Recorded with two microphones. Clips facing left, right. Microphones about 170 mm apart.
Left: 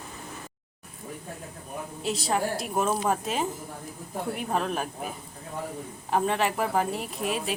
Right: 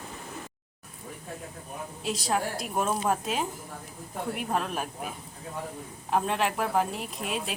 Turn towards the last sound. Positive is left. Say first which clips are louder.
# left 3 dB
turn(degrees=0)  # may be behind; listen again after turning